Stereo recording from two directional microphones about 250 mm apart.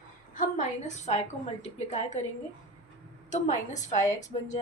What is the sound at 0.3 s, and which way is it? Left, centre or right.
Speech, left.